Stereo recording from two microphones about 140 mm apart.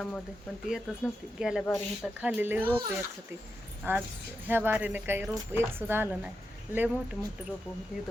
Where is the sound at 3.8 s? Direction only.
15° right (ahead or behind).